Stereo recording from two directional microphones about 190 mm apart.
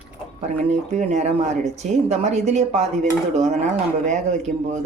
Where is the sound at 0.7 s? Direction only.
35° right (ahead or behind).